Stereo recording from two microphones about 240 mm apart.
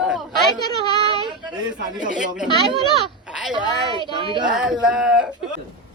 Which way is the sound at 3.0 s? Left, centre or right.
Centre.